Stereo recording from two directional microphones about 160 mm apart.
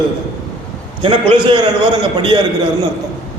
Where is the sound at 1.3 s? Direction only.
30° right (ahead or behind).